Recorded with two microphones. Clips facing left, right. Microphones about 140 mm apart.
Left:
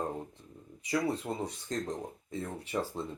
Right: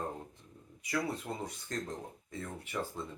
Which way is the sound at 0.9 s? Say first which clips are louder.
Left 4 dB; 30° left (ahead or behind).